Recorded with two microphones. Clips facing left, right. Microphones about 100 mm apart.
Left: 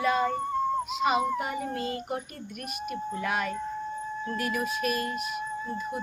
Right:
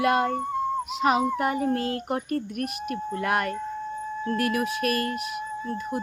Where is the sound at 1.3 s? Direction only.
60° right (ahead or behind).